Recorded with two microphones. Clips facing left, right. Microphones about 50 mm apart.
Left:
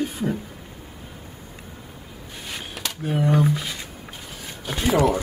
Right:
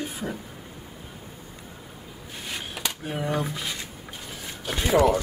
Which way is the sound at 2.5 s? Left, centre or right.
Centre.